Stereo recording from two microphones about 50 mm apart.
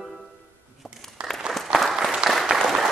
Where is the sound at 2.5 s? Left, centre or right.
Centre.